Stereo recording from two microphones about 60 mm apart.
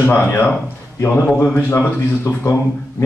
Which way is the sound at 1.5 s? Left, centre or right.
Left.